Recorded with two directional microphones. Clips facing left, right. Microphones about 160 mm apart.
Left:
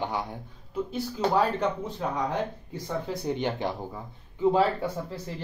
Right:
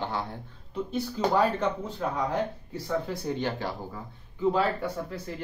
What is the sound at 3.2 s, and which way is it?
Speech, 20° left (ahead or behind).